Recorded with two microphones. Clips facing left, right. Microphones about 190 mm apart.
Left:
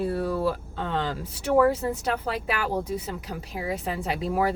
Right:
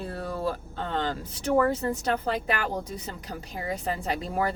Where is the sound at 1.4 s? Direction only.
5° left (ahead or behind).